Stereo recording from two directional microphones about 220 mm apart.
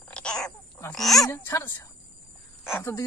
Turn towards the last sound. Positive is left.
turn(degrees=10)  # may be behind; listen again after turning